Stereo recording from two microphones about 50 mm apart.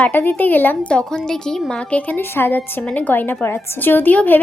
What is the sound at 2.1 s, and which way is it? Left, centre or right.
Speech, left.